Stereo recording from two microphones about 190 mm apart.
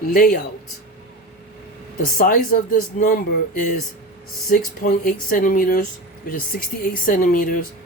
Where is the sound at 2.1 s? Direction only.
45° left (ahead or behind).